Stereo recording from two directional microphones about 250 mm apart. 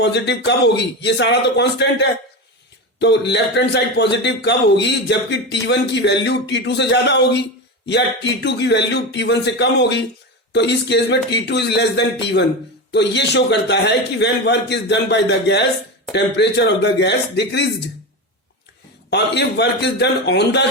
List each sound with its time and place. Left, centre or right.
0.0 s a man's voice: left
19.1 s a man's voice: left